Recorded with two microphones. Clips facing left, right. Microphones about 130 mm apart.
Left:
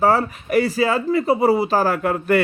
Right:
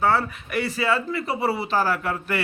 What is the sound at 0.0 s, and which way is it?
A man's voice, 40° left (ahead or behind).